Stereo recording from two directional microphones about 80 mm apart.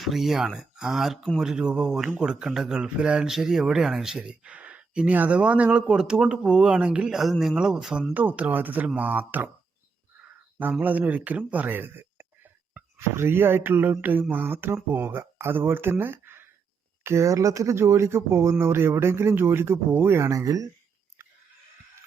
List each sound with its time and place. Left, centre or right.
0.0 s speech: centre
8.1 s speech: right
10.6 s speech: right
20.3 s speech: right